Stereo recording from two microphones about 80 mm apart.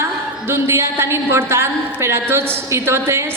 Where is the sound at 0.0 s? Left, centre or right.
Right.